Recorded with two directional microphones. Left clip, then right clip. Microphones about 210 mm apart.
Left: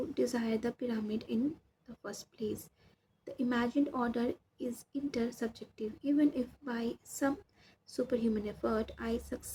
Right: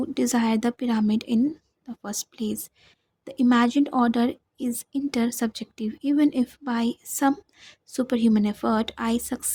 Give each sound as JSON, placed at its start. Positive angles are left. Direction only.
{"t": 0.1, "sound": "a woman's voice", "side_deg": -50}